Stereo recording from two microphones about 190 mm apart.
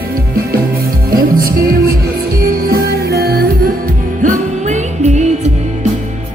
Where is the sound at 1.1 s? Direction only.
50° right (ahead or behind).